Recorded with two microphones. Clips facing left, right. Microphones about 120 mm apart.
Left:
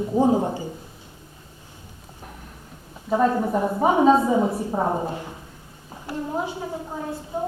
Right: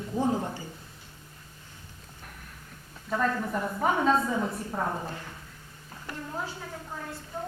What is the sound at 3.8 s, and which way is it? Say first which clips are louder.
A woman's voice: left 8 dB; 20° left (ahead or behind).